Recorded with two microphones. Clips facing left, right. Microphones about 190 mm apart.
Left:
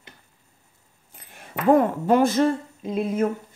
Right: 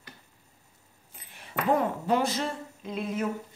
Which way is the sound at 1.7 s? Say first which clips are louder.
Left 8 dB; 50° left (ahead or behind).